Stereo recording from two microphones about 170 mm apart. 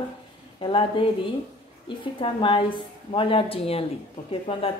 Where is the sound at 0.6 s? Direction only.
30° left (ahead or behind).